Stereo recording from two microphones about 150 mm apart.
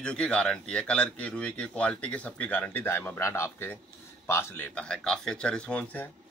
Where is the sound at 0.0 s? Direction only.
5° left (ahead or behind).